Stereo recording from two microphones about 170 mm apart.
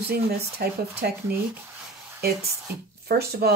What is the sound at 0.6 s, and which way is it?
Speech, 65° right (ahead or behind).